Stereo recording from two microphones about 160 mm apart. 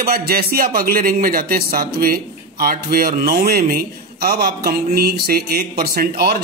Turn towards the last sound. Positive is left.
turn(degrees=-65)  # may be behind; listen again after turning